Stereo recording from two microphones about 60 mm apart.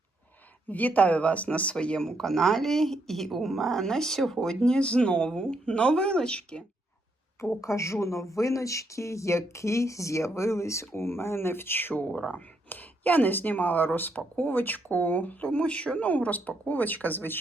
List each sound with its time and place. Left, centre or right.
0.7 s speech: left
7.6 s a woman's voice: left
12.1 s speech: centre
12.6 s speech: left